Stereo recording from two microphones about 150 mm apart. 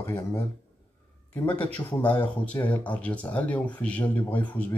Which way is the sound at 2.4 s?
10° left (ahead or behind).